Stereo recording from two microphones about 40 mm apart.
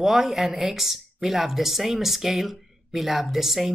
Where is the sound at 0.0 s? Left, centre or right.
Centre.